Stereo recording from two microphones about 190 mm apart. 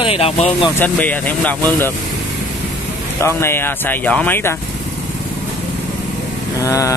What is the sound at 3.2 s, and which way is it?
Speech, 15° left (ahead or behind).